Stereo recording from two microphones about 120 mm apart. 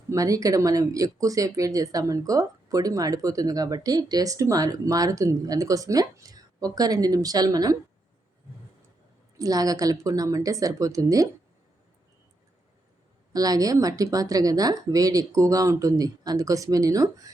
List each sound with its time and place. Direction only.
0.1 s speech: 30° right (ahead or behind)
9.4 s speech: 30° right (ahead or behind)
13.3 s speech: 30° right (ahead or behind)